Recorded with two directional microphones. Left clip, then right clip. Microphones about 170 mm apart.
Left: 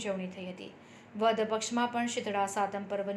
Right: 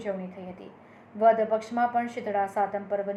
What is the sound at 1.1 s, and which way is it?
A woman's voice, 30° left (ahead or behind).